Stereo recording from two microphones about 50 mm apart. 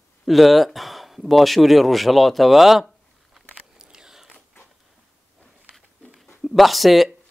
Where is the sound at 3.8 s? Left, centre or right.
Centre.